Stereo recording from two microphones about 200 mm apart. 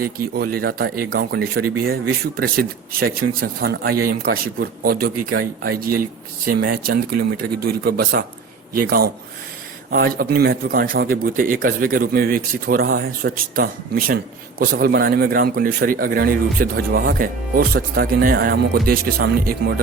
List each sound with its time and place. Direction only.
0.3 s a man's voice: 50° right (ahead or behind)